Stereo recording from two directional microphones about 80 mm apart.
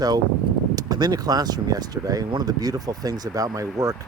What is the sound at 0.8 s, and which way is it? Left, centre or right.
Speech, right.